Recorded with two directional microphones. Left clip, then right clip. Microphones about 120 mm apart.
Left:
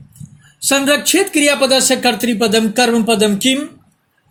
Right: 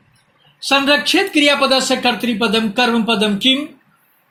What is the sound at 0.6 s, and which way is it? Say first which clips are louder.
Speech: even; 55° left (ahead or behind).